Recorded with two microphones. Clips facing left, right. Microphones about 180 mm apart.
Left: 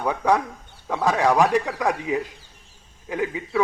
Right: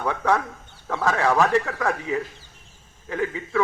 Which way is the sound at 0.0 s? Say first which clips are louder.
Left 2 dB; 15° left (ahead or behind).